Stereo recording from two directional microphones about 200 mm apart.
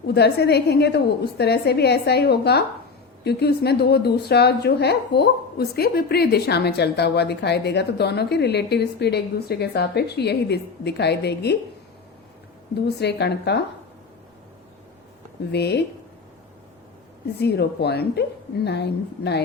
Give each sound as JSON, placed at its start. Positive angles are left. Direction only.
{"t": 0.1, "sound": "a woman's voice", "side_deg": 55}
{"t": 12.7, "sound": "a woman's voice", "side_deg": 55}
{"t": 15.5, "sound": "a woman's voice", "side_deg": 55}
{"t": 17.4, "sound": "a woman's voice", "side_deg": 55}